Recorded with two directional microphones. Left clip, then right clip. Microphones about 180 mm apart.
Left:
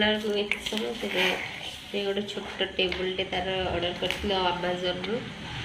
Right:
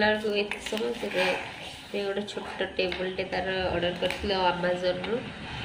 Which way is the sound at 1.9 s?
Centre (ahead or behind).